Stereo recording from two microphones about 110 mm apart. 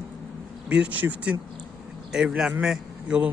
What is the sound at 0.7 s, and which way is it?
A man's voice, 10° right (ahead or behind).